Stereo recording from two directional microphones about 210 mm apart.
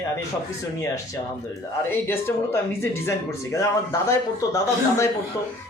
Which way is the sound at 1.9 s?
10° left (ahead or behind).